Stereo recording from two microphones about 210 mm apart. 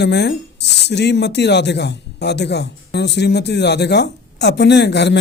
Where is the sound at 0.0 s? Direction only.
50° left (ahead or behind).